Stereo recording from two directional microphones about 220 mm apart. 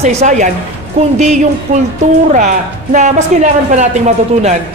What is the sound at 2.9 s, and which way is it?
Speech, 35° right (ahead or behind).